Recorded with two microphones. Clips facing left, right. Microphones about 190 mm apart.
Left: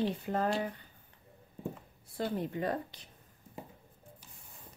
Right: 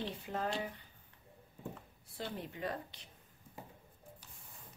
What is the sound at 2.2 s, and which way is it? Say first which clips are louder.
Speech: left 8 dB; 45° left (ahead or behind).